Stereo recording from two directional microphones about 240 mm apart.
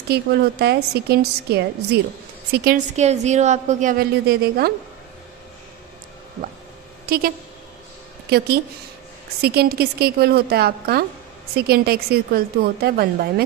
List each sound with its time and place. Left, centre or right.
0.1 s a woman's voice: right
7.0 s speech: right
9.4 s a woman's voice: right